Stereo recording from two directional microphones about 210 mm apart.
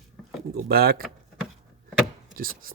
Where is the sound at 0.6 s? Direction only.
45° right (ahead or behind).